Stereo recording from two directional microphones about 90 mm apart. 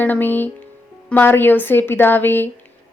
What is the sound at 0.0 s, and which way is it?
A woman's voice, 20° left (ahead or behind).